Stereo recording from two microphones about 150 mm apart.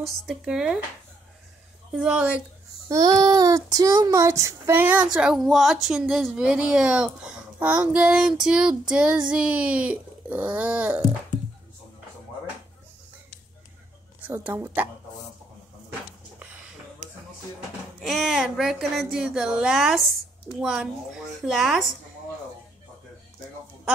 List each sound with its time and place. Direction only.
0.0 s speech: centre (ahead or behind)
2.0 s child singing: 5° right (ahead or behind)
2.9 s child singing: 25° right (ahead or behind)
14.2 s child singing: 15° right (ahead or behind)
18.0 s speech: centre (ahead or behind)